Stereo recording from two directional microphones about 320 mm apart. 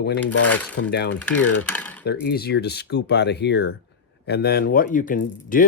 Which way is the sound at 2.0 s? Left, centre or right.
Left.